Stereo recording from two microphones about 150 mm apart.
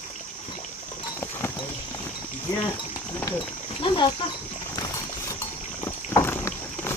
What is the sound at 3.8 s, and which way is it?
Speech, 35° left (ahead or behind).